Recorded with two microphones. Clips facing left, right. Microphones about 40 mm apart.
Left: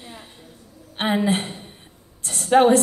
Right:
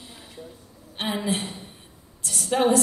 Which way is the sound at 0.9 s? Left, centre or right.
Left.